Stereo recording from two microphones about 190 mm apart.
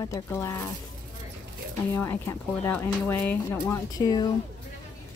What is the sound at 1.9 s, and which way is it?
Speech, 15° left (ahead or behind).